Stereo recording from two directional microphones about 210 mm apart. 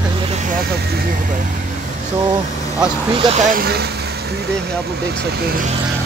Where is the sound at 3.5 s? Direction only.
45° right (ahead or behind).